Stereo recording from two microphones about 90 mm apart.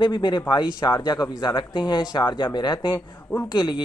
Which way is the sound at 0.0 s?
55° left (ahead or behind).